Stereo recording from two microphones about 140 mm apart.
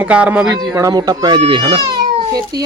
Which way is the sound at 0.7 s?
25° right (ahead or behind).